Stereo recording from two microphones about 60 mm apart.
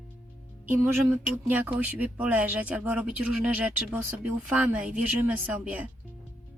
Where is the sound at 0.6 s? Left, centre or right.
Right.